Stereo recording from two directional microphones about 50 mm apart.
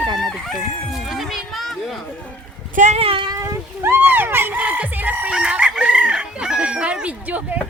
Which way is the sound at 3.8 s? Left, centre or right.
Right.